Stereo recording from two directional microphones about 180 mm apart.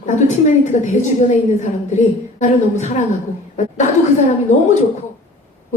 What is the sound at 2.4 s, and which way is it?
Speech, 40° left (ahead or behind).